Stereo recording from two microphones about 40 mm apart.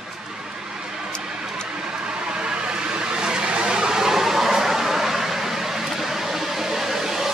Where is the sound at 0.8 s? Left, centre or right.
Right.